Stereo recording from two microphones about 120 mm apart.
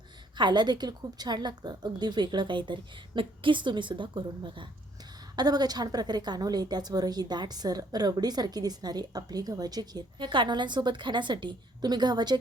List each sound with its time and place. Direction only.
0.3 s a woman's voice: 40° right (ahead or behind)